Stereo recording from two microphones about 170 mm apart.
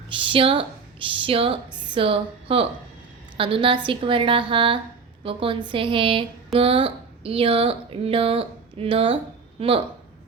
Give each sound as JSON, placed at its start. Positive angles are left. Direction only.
{"t": 0.1, "sound": "a woman's voice", "side_deg": -30}